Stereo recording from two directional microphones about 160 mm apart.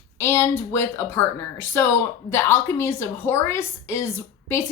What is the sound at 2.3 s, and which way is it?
A woman's voice, 15° left (ahead or behind).